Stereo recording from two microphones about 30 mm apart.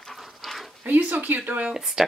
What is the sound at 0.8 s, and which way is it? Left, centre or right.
Speech, right.